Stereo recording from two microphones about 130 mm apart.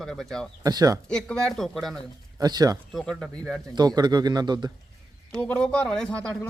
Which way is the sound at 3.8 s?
30° right (ahead or behind).